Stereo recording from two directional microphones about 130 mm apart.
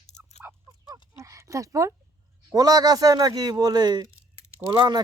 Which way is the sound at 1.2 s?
25° right (ahead or behind).